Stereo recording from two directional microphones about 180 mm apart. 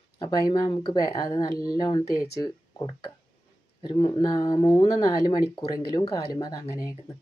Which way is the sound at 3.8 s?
25° left (ahead or behind).